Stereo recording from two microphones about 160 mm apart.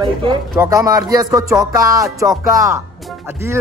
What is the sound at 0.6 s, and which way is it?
Music, 20° right (ahead or behind).